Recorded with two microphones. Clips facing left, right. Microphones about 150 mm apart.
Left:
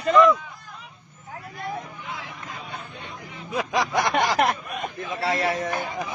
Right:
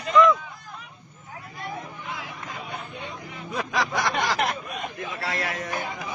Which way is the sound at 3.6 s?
20° left (ahead or behind).